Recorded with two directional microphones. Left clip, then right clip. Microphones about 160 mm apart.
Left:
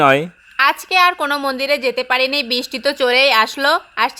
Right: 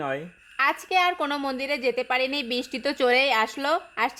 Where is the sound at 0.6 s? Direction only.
Centre (ahead or behind).